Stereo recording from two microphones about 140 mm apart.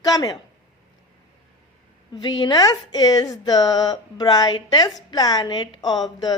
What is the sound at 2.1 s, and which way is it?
Speech, 35° left (ahead or behind).